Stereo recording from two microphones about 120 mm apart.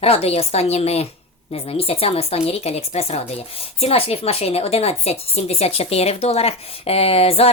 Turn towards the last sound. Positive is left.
turn(degrees=55)  # may be behind; listen again after turning